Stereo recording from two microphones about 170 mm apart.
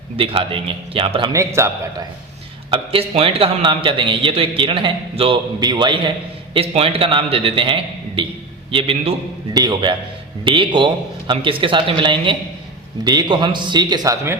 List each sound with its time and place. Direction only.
0.2 s a man's voice: 35° right (ahead or behind)
1.3 s a man's voice: 15° right (ahead or behind)
2.6 s a man's voice: 30° right (ahead or behind)